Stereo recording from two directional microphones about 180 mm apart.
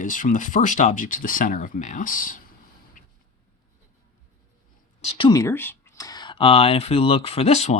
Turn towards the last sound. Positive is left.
turn(degrees=35)  # may be behind; listen again after turning